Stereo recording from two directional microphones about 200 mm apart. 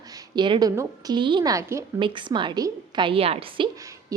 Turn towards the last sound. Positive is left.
turn(degrees=-20)  # may be behind; listen again after turning